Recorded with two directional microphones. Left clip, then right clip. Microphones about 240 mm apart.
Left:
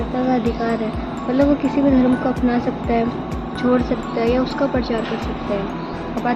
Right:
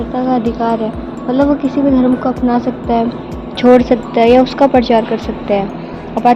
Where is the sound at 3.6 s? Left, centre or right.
Right.